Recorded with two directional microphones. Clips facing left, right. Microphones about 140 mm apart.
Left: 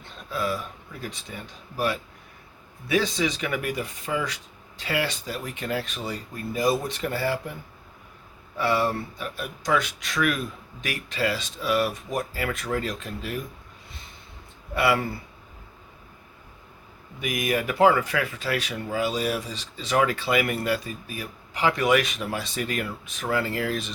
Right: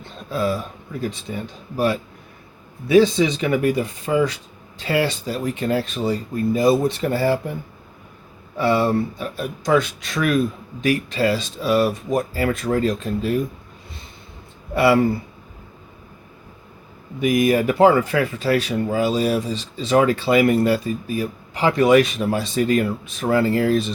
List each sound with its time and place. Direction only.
0.3 s speech: 30° right (ahead or behind)
8.5 s speech: 30° right (ahead or behind)
14.8 s speech: 30° right (ahead or behind)
17.2 s speech: 30° right (ahead or behind)